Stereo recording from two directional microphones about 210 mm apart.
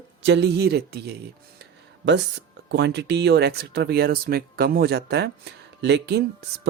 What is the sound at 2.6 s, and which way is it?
Speech, 55° right (ahead or behind).